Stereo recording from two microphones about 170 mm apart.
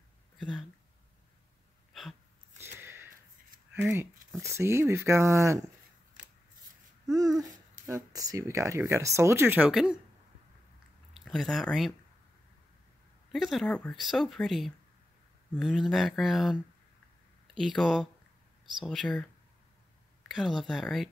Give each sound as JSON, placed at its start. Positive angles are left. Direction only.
{"t": 0.4, "sound": "speech", "side_deg": 5}
{"t": 2.0, "sound": "a sound", "side_deg": 0}
{"t": 2.6, "sound": "a sound", "side_deg": -15}
{"t": 4.4, "sound": "speech", "side_deg": -15}
{"t": 7.2, "sound": "a sound", "side_deg": -20}
{"t": 7.8, "sound": "speech", "side_deg": -20}
{"t": 11.1, "sound": "speech", "side_deg": 0}
{"t": 13.3, "sound": "speech", "side_deg": 0}
{"t": 17.6, "sound": "speech", "side_deg": 0}
{"t": 20.2, "sound": "speech", "side_deg": 0}